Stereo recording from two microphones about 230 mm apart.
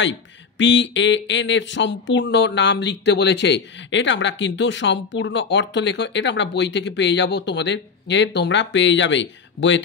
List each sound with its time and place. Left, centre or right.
0.6 s speech: left